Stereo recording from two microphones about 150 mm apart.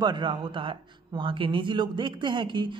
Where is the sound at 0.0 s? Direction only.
30° right (ahead or behind).